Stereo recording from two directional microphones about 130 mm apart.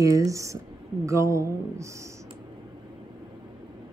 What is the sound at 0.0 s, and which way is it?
Speech, 25° right (ahead or behind).